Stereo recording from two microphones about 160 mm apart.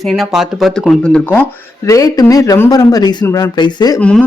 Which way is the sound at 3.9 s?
5° left (ahead or behind).